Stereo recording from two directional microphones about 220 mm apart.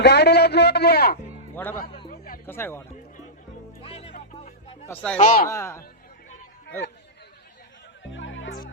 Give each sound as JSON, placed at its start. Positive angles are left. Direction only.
{"t": 0.0, "sound": "a man's voice", "side_deg": 50}
{"t": 1.5, "sound": "speech", "side_deg": 10}
{"t": 2.0, "sound": "music", "side_deg": 40}
{"t": 2.5, "sound": "speech", "side_deg": 10}
{"t": 3.8, "sound": "music", "side_deg": 25}
{"t": 4.9, "sound": "speech", "side_deg": 10}
{"t": 5.1, "sound": "speech", "side_deg": 35}
{"t": 5.5, "sound": "speech", "side_deg": 10}
{"t": 8.1, "sound": "music", "side_deg": 60}